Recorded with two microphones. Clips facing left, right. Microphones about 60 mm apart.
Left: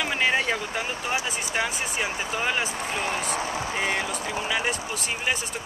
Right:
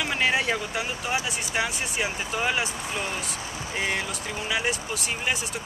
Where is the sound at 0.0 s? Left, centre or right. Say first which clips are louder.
Left 1 dB; centre.